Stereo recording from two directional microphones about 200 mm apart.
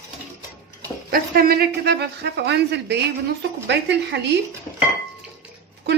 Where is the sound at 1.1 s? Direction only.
50° right (ahead or behind).